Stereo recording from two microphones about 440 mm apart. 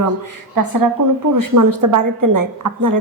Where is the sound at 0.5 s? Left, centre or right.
Right.